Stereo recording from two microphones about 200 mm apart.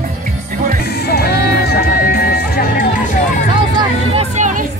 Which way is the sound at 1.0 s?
50° left (ahead or behind).